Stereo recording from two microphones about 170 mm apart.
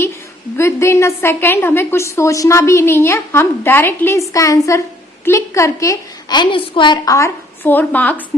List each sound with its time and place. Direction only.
0.5 s a woman's voice: 15° left (ahead or behind)